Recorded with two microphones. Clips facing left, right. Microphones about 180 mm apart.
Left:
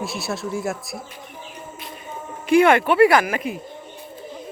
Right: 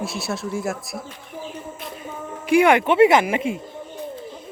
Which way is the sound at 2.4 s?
10° right (ahead or behind).